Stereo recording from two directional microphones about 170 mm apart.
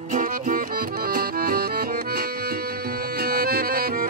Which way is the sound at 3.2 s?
65° right (ahead or behind).